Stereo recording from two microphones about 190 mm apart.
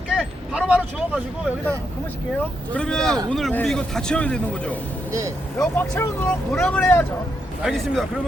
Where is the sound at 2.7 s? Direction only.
5° left (ahead or behind).